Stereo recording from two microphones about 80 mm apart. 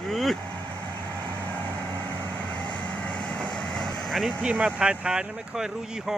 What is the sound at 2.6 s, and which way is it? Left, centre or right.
Vehicle, centre.